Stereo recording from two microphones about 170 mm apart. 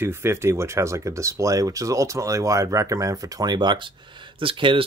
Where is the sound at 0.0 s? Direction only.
15° right (ahead or behind).